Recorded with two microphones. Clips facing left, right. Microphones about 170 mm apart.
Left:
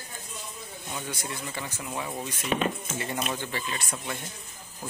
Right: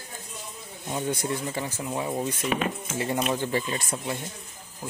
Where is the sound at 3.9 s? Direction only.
25° right (ahead or behind).